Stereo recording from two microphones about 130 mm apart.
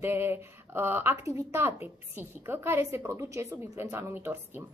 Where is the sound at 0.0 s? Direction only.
15° right (ahead or behind).